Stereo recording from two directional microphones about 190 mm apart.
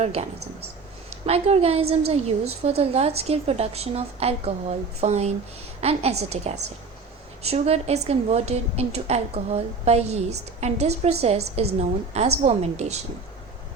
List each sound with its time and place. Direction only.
0.0 s a woman's voice: 35° right (ahead or behind)